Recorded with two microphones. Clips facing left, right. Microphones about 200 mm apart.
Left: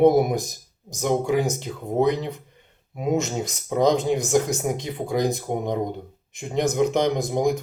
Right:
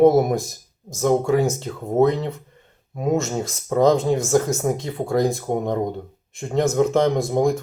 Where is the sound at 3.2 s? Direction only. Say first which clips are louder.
Right 2 dB; 15° left (ahead or behind).